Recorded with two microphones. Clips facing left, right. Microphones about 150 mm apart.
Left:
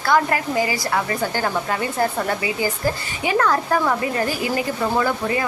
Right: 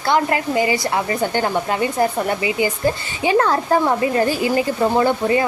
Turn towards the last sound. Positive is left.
turn(degrees=-25)  # may be behind; listen again after turning